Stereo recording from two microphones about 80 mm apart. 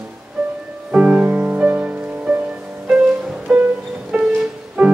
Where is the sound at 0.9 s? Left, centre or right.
Centre.